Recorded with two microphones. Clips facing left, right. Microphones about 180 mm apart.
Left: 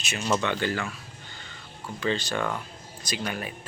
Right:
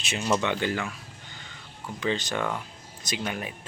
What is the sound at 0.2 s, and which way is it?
Speech, 15° right (ahead or behind).